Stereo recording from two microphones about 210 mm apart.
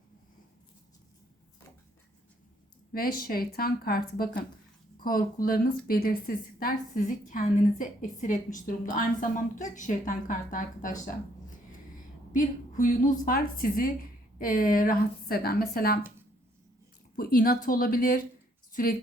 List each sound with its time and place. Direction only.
2.9 s a woman's voice: 45° left (ahead or behind)
17.2 s a woman's voice: 45° left (ahead or behind)